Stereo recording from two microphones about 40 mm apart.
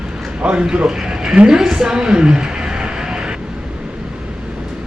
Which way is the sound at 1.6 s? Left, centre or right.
Centre.